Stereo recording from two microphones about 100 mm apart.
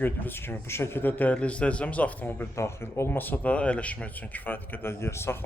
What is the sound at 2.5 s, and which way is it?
Speech, 25° left (ahead or behind).